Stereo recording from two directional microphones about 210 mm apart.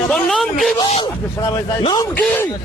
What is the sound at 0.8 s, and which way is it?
A man's voice, 25° left (ahead or behind).